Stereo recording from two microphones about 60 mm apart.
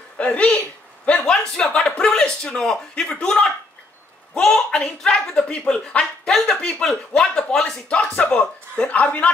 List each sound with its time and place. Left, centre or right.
0.2 s a man's voice: left
7.9 s speech: centre